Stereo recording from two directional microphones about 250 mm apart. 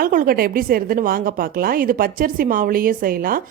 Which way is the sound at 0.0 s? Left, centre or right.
Right.